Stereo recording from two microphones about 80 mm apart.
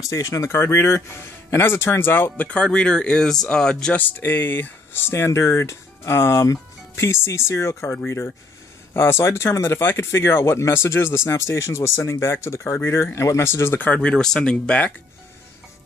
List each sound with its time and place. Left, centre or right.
0.0 s speech: left; by 4.0 s centre
4.0 s speech: left